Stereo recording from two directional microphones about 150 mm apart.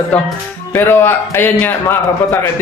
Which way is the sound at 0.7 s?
15° left (ahead or behind).